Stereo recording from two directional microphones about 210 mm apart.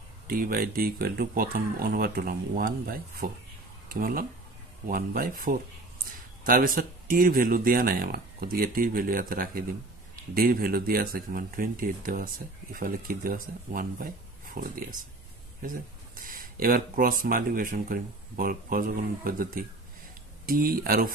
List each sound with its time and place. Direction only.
0.3 s speech: 45° right (ahead or behind)
16.2 s speech: 40° right (ahead or behind)